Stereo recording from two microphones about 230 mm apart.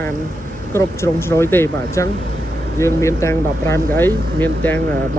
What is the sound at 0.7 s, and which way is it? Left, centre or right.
Speech, centre.